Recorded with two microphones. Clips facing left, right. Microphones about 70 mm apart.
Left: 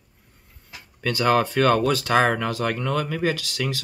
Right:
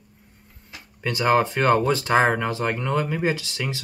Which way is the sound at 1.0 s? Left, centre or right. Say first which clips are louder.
Even; centre.